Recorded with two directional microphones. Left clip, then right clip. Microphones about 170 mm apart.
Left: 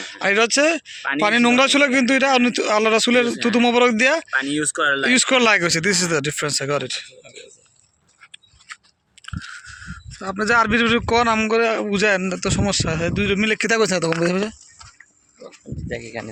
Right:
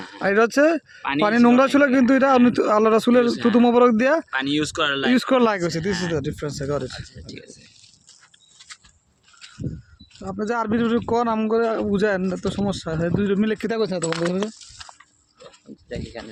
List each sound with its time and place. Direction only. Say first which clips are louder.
0.0 s speech: left 1 dB; 40° right (ahead or behind)
4.3 s speech: left 2 dB; 30° right (ahead or behind)
5.0 s speech: left 3 dB; 40° right (ahead or behind)
5.5 s speech: left 6 dB; 20° right (ahead or behind)
6.7 s speech: left 4 dB; 30° right (ahead or behind)
10.2 s a man's voice: left 5 dB; 10° left (ahead or behind)
10.4 s speech: left 7 dB; 20° right (ahead or behind)
12.5 s speech: left 8 dB; 20° right (ahead or behind)
13.7 s speech: left 5 dB; 5° left (ahead or behind)
15.9 s speech: left 4 dB; 40° left (ahead or behind)